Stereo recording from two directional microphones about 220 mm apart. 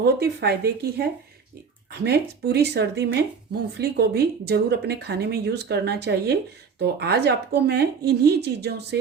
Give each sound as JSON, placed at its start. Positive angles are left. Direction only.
{"t": 0.0, "sound": "speech", "side_deg": -45}